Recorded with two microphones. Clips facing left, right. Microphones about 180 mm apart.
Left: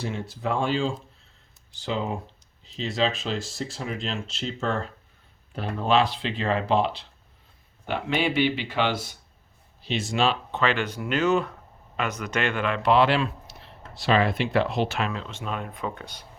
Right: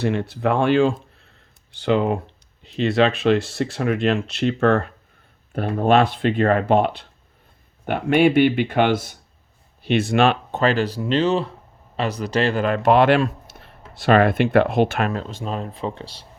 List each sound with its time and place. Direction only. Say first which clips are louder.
0.0 s speech: right 9 dB; 65° right (ahead or behind)
5.5 s speech: right 6 dB; 50° right (ahead or behind)
10.6 s speech: right 6 dB; 35° right (ahead or behind)